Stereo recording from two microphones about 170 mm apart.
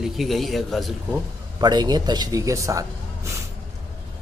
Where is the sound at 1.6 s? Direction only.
25° right (ahead or behind).